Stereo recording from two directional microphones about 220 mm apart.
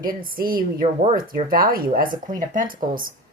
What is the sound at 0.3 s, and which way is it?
Speech, 40° right (ahead or behind).